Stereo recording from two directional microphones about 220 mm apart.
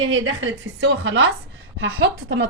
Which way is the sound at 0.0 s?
60° right (ahead or behind).